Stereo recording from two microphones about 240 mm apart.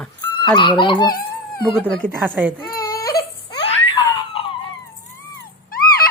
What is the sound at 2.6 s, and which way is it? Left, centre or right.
Baby cry, centre.